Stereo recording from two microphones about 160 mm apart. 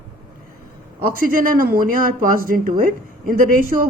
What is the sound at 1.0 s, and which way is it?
A man's voice, 65° right (ahead or behind).